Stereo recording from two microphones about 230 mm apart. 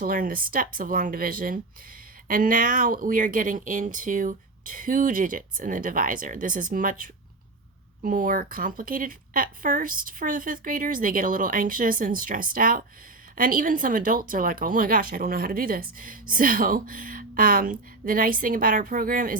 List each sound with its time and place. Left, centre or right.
0.0 s speech: right